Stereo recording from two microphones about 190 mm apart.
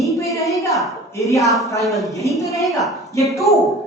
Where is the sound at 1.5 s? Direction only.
Centre (ahead or behind).